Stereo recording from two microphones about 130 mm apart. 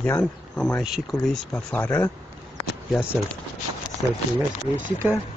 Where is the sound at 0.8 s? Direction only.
Centre (ahead or behind); by 2.1 s 15° left (ahead or behind).